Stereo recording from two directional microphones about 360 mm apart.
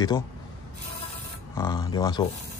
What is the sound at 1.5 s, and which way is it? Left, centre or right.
Speech, centre.